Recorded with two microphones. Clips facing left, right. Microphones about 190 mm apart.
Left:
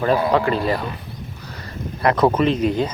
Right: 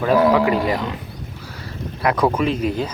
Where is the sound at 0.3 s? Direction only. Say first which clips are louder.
Right 1 dB; 10° right (ahead or behind).